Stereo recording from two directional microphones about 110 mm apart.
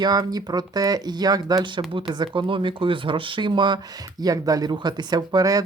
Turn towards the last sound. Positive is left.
turn(degrees=-35)  # may be behind; listen again after turning